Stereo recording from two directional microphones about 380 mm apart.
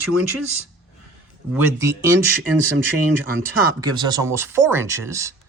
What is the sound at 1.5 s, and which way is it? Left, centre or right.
Speech, centre.